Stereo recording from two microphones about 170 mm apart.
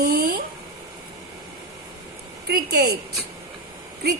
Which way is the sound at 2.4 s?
65° right (ahead or behind).